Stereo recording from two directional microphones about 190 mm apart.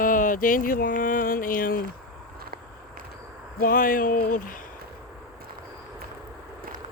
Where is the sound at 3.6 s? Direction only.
45° left (ahead or behind).